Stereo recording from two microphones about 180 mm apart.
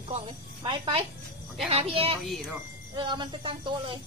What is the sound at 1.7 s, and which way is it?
A woman's voice, 30° right (ahead or behind).